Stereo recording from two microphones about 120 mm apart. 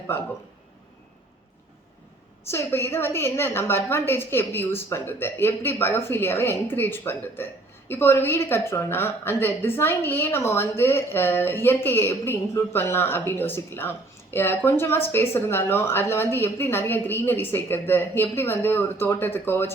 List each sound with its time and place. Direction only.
2.5 s a woman's voice: 20° left (ahead or behind)